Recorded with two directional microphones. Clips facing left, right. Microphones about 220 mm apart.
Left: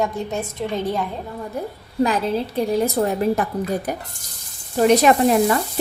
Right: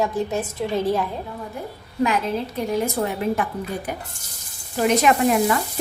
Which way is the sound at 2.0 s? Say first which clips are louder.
Left 2 dB; 35° left (ahead or behind).